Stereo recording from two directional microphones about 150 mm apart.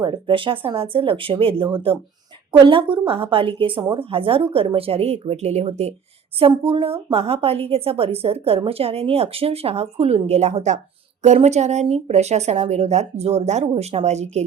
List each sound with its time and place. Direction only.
0.0 s a woman's voice: 30° right (ahead or behind); by 14.4 s 50° right (ahead or behind)